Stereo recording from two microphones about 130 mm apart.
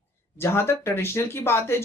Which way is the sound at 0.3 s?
20° left (ahead or behind).